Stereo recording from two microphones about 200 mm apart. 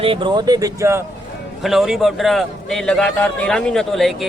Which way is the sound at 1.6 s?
Centre (ahead or behind).